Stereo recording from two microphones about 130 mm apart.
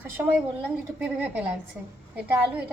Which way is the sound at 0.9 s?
10° right (ahead or behind).